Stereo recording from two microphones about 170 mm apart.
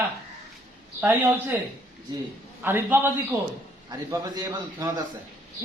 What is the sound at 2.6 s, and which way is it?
A man's voice, 10° right (ahead or behind).